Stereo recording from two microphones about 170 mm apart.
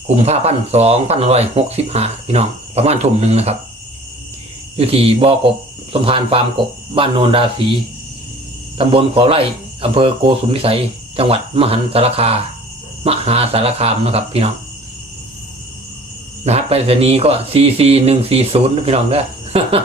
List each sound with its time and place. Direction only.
0.2 s speech: 40° right (ahead or behind)
4.8 s speech: 35° right (ahead or behind)
8.9 s speech: 30° right (ahead or behind)
16.4 s speech: 40° right (ahead or behind)